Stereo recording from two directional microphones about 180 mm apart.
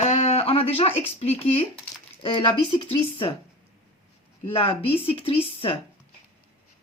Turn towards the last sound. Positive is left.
turn(degrees=30)  # may be behind; listen again after turning